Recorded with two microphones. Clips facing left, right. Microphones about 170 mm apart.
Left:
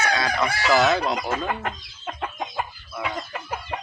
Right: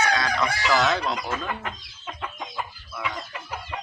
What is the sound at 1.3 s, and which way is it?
Chicken, 50° left (ahead or behind).